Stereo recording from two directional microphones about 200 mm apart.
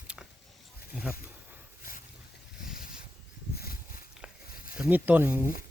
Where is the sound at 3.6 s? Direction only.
50° left (ahead or behind).